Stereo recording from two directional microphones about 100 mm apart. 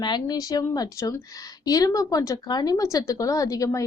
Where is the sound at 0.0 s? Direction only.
45° left (ahead or behind).